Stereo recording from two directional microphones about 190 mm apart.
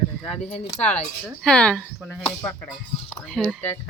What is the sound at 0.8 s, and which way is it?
Speech, 35° left (ahead or behind).